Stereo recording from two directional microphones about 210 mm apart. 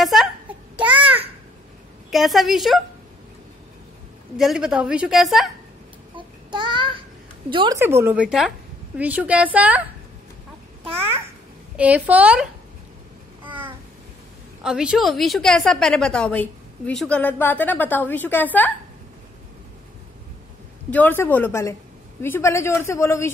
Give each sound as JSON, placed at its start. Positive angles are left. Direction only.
{"t": 0.0, "sound": "babbling", "side_deg": 0}
{"t": 2.0, "sound": "a woman's voice", "side_deg": 0}
{"t": 4.4, "sound": "a woman's voice", "side_deg": 0}
{"t": 6.1, "sound": "child singing", "side_deg": -20}
{"t": 7.5, "sound": "a woman's voice", "side_deg": -15}
{"t": 10.9, "sound": "a child's voice", "side_deg": -25}
{"t": 11.7, "sound": "a woman's voice", "side_deg": -5}
{"t": 13.5, "sound": "a sound", "side_deg": -10}
{"t": 14.6, "sound": "a woman's voice", "side_deg": -5}
{"t": 20.9, "sound": "speech", "side_deg": 10}